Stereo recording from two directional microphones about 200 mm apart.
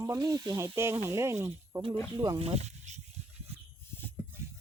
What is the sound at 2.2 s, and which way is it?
Speech, 25° right (ahead or behind).